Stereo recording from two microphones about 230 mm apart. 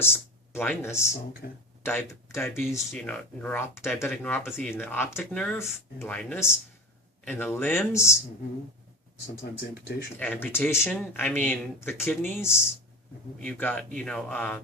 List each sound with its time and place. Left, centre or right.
0.0 s speech: centre
1.4 s speech: left
1.8 s speech: centre
4.7 s speech: centre
9.4 s speech: left
10.2 s speech: centre